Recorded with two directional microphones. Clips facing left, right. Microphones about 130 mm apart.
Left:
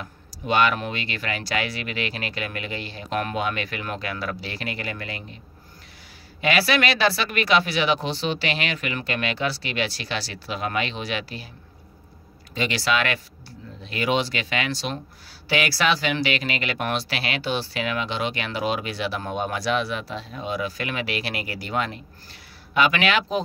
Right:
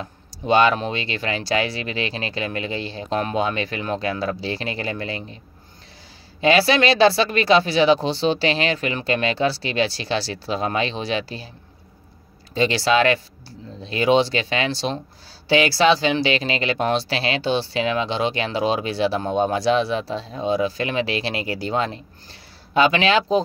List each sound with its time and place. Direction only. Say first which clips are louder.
0.0 s speech: right 4 dB; 30° right (ahead or behind)
6.4 s speech: right 5 dB; 30° right (ahead or behind)
12.5 s speech: right 6 dB; 30° right (ahead or behind)